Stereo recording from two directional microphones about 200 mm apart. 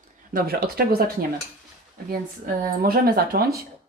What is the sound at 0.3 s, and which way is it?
Speech, 50° right (ahead or behind).